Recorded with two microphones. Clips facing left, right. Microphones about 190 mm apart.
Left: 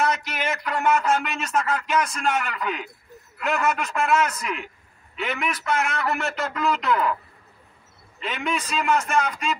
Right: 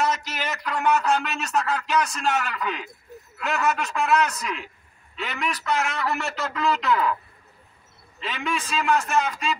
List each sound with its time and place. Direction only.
0.4 s a man's voice: 5° left (ahead or behind)
8.2 s a man's voice: centre (ahead or behind)